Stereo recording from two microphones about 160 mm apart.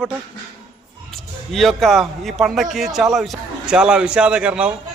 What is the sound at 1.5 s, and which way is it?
A man's voice, centre (ahead or behind).